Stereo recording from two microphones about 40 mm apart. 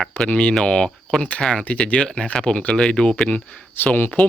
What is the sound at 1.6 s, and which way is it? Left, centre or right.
Speech, left.